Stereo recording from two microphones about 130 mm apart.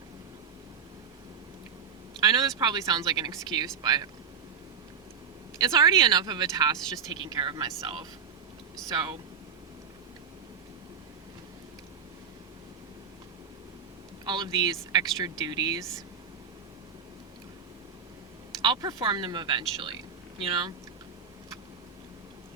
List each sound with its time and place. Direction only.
2.2 s speech: 30° right (ahead or behind)
5.5 s speech: 30° right (ahead or behind)
14.3 s speech: 35° right (ahead or behind)
18.6 s speech: 35° right (ahead or behind)